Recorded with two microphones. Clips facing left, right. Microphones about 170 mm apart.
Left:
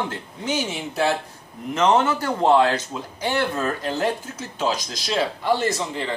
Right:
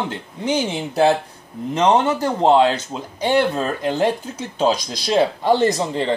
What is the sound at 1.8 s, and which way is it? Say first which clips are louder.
Speech: right 2 dB; 20° right (ahead or behind).